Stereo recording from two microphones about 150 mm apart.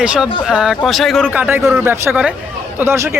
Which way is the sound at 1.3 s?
10° right (ahead or behind).